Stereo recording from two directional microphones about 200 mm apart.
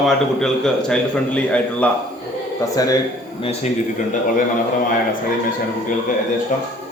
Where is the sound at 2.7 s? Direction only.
15° left (ahead or behind).